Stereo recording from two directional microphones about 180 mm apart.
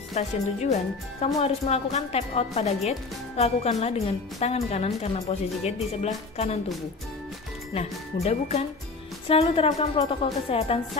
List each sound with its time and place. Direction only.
0.2 s a woman's voice: 35° left (ahead or behind)
7.7 s a woman's voice: 35° left (ahead or behind)